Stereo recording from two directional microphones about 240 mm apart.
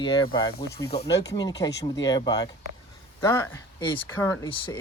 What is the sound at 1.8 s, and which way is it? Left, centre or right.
Speech, left.